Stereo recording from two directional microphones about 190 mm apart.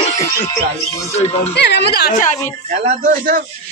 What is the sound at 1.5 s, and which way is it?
Speech, 65° left (ahead or behind).